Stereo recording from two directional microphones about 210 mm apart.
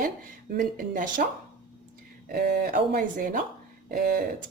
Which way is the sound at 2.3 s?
45° right (ahead or behind).